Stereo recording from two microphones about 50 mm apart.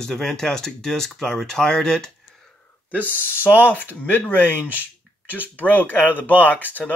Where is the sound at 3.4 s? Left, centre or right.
Left.